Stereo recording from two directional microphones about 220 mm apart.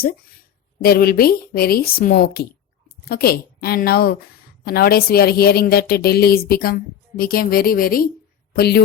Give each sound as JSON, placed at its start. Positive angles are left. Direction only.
{"t": 0.8, "sound": "a woman's voice", "side_deg": 45}